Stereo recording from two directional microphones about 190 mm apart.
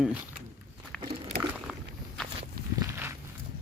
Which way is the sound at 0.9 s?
Centre (ahead or behind).